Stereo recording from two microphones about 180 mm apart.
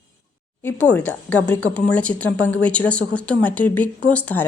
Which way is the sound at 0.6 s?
10° left (ahead or behind).